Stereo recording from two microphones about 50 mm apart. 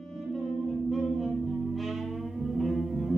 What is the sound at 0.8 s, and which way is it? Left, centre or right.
Music, centre.